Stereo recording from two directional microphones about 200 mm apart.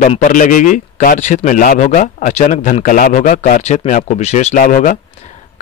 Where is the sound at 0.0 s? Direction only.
40° left (ahead or behind).